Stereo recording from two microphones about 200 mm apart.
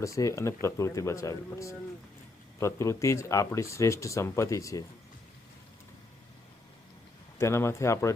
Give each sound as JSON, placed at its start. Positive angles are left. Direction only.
{"t": 0.0, "sound": "speech", "side_deg": 15}
{"t": 7.3, "sound": "speech", "side_deg": 15}